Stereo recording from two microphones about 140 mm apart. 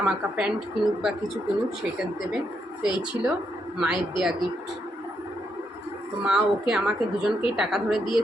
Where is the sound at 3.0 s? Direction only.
5° right (ahead or behind).